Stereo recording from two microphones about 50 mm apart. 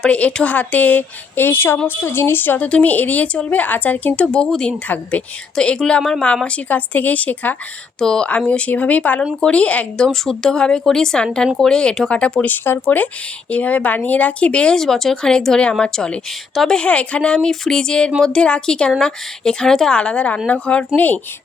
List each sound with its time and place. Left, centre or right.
0.0 s a woman's voice: left
2.0 s a woman's voice: left
2.6 s a woman's voice: left
6.7 s a woman's voice: left
7.9 s a woman's voice: centre
8.4 s speech: left
10.0 s a woman's voice: centre
12.5 s a woman's voice: left
13.5 s speech: left
14.8 s a woman's voice: centre
20.0 s speech: left